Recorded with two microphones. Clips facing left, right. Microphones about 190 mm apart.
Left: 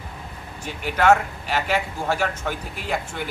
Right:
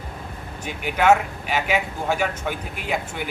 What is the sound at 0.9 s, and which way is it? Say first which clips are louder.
Speech: even; 10° right (ahead or behind).